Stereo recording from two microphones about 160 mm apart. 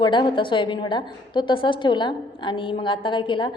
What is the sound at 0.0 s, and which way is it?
A woman's voice, 30° left (ahead or behind).